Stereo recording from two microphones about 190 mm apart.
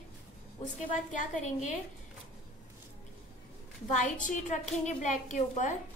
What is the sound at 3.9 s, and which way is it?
A woman's voice, 40° left (ahead or behind).